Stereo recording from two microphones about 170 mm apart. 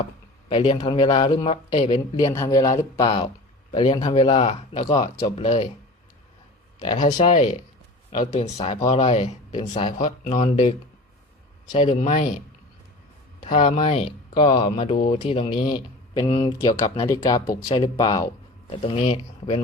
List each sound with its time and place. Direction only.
0.4 s speech: 35° left (ahead or behind)
2.1 s speech: 20° left (ahead or behind); by 5.6 s 35° left (ahead or behind)
7.3 s speech: 45° left (ahead or behind)
10.0 s speech: 45° left (ahead or behind)
11.7 s speech: 30° left (ahead or behind)
11.9 s speech: 45° left (ahead or behind)
13.4 s speech: 40° left (ahead or behind)